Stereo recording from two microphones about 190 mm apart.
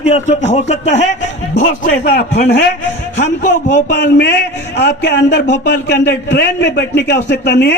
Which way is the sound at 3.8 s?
65° left (ahead or behind).